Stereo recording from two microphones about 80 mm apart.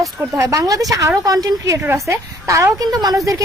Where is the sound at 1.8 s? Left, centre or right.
Right.